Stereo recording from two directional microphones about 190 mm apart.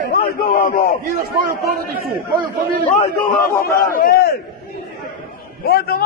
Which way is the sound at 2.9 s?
45° left (ahead or behind).